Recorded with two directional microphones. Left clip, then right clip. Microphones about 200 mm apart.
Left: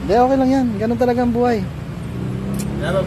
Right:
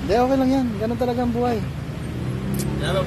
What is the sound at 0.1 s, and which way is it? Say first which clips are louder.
A man's voice: left 4 dB; 15° left (ahead or behind).